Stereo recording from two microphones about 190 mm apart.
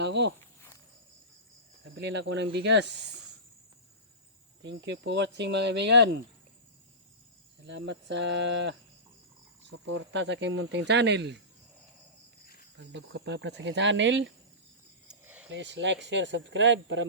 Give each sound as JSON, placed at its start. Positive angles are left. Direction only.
{"t": 0.0, "sound": "speech", "side_deg": -65}
{"t": 2.0, "sound": "speech", "side_deg": -70}
{"t": 4.6, "sound": "speech", "side_deg": -70}
{"t": 7.7, "sound": "speech", "side_deg": -65}
{"t": 12.9, "sound": "speech", "side_deg": -65}
{"t": 15.0, "sound": "a sound", "side_deg": -5}
{"t": 15.4, "sound": "speech", "side_deg": -70}